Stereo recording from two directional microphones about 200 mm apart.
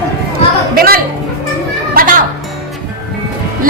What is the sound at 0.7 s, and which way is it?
Speech, 50° right (ahead or behind).